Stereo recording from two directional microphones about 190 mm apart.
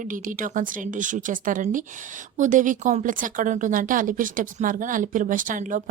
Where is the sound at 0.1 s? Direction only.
45° right (ahead or behind).